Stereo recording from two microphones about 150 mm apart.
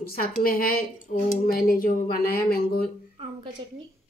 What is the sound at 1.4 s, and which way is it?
Speech, 75° left (ahead or behind).